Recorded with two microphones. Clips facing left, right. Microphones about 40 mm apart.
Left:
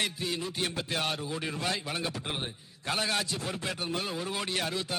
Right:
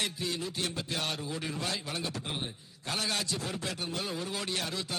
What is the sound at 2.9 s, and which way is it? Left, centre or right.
A man's voice, centre.